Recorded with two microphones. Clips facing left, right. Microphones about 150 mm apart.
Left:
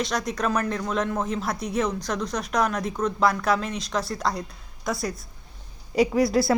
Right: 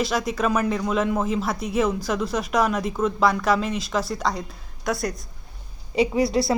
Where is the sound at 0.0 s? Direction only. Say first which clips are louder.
Right 3 dB; 5° right (ahead or behind).